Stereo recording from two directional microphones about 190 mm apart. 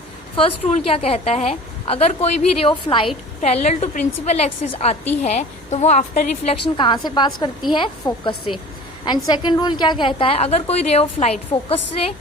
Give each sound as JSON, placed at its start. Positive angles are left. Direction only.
{"t": 0.3, "sound": "a woman's voice", "side_deg": 30}